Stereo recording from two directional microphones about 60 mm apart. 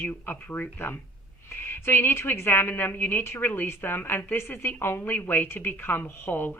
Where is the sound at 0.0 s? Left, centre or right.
Left.